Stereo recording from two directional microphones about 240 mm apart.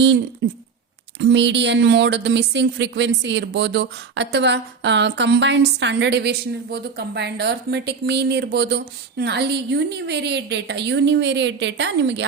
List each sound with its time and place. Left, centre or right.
0.4 s speech: right